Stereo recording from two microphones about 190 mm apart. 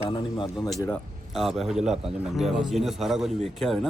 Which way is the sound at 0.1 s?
25° left (ahead or behind).